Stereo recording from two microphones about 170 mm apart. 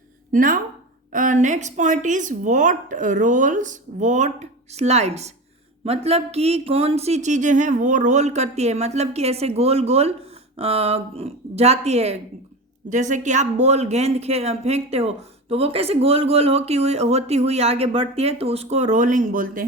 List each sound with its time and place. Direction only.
0.3 s speech: 55° right (ahead or behind)